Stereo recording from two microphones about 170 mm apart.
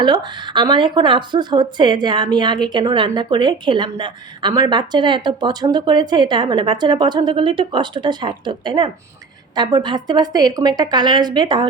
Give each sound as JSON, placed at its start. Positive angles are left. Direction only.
{"t": 0.0, "sound": "speech", "side_deg": -25}